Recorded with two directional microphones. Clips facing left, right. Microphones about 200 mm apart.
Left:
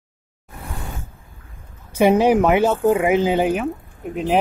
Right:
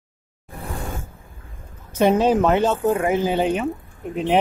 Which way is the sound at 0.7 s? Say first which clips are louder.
Right 3 dB; 45° right (ahead or behind).